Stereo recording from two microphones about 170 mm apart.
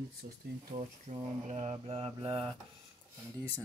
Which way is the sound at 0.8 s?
40° right (ahead or behind).